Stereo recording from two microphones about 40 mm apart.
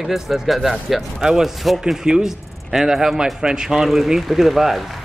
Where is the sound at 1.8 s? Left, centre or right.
Centre.